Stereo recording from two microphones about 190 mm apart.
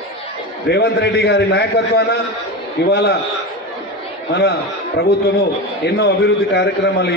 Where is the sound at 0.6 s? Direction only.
60° left (ahead or behind).